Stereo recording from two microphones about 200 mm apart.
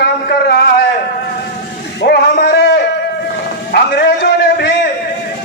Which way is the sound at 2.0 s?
55° left (ahead or behind).